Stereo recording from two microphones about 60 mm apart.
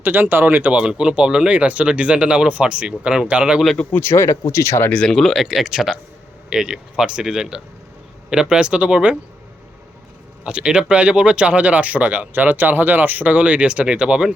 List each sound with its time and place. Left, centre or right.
0.0 s speech: right
0.8 s speech: centre
3.9 s speech: left
5.1 s speech: centre
10.4 s speech: centre